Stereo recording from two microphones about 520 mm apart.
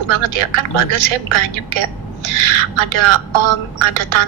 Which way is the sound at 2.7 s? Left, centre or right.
Right.